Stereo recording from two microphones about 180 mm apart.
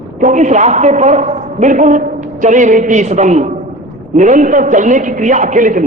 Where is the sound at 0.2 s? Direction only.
45° right (ahead or behind).